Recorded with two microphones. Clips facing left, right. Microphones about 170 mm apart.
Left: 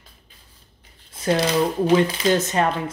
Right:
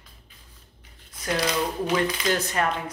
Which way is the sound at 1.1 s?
30° left (ahead or behind).